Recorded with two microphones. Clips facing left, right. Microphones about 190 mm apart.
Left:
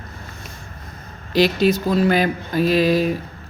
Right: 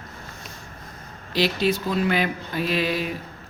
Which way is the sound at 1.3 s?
45° left (ahead or behind).